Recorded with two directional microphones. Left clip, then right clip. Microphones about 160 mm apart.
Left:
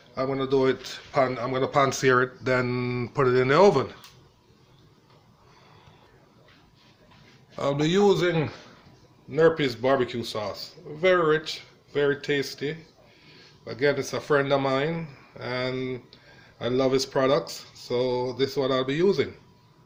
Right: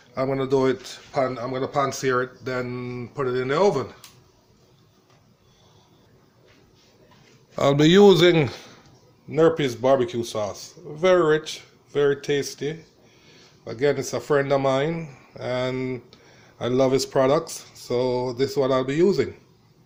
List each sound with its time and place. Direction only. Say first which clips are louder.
0.1 s speech: right 2 dB; 55° right (ahead or behind)
0.9 s a man's voice: even; 15° right (ahead or behind)
1.7 s speech: left 2 dB; 10° left (ahead or behind)
7.5 s speech: right 7 dB; 60° right (ahead or behind)